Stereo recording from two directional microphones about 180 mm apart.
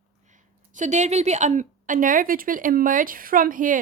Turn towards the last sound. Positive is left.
turn(degrees=-50)  # may be behind; listen again after turning